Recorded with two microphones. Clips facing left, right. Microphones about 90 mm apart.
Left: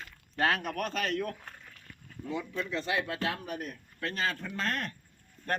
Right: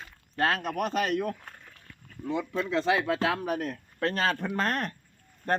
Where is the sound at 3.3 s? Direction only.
90° right.